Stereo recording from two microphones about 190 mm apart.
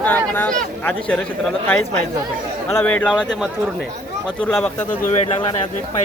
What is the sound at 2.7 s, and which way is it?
Speech, 10° left (ahead or behind).